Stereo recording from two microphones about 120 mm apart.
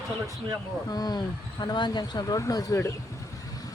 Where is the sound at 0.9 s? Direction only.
35° left (ahead or behind).